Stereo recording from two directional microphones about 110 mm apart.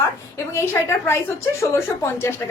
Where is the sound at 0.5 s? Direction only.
20° left (ahead or behind).